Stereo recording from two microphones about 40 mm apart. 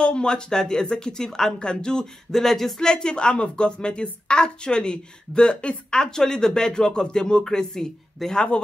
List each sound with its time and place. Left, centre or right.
0.0 s speech: left